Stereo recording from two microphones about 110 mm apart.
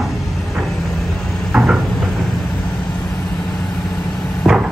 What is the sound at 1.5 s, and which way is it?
Cupboard open or close, 5° right (ahead or behind).